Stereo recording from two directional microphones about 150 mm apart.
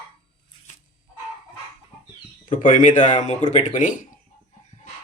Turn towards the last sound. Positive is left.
turn(degrees=60)  # may be behind; listen again after turning